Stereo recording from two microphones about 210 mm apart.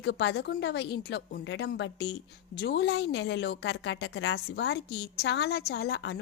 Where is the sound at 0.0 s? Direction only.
55° left (ahead or behind).